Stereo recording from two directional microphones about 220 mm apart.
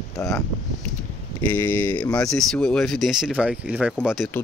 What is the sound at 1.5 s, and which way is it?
Speech, 10° left (ahead or behind).